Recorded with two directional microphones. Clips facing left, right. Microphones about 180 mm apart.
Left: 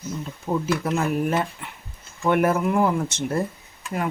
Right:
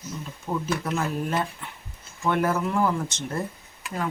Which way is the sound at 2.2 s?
20° left (ahead or behind).